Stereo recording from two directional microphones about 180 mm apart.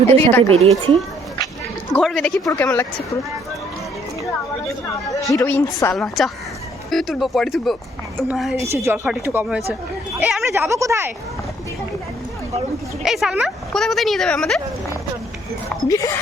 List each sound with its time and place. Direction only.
0.1 s speech: 10° left (ahead or behind)
0.5 s speech: 35° right (ahead or behind)
1.9 s speech: centre (ahead or behind)
5.3 s speech: 15° left (ahead or behind)
5.9 s speech: centre (ahead or behind)
8.5 s a woman's voice: 15° right (ahead or behind)
10.5 s a woman's voice: 15° right (ahead or behind)
13.0 s speech: centre (ahead or behind)
15.9 s speech: 20° left (ahead or behind)